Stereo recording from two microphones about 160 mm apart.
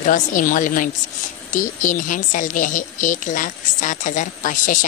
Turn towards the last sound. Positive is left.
turn(degrees=55)  # may be behind; listen again after turning